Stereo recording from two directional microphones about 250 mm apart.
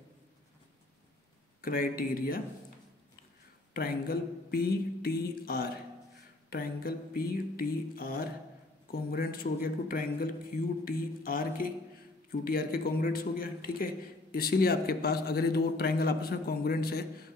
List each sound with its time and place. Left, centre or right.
1.6 s a man's voice: left
3.7 s a man's voice: left